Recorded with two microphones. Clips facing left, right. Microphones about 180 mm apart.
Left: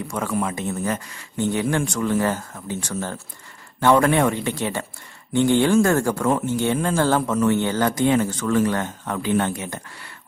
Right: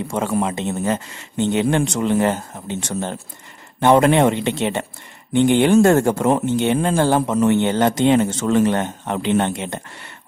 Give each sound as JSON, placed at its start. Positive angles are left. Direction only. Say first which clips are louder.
{"t": 0.1, "sound": "speech", "louder": "right 4 dB", "side_deg": -25}